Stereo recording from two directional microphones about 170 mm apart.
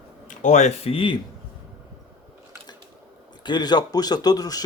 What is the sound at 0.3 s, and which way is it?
Speech, 45° left (ahead or behind).